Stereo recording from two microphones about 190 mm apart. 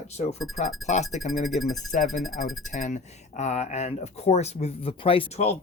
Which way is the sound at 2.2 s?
Centre (ahead or behind).